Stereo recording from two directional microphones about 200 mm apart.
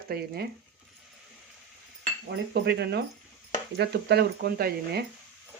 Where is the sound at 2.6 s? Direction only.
55° right (ahead or behind).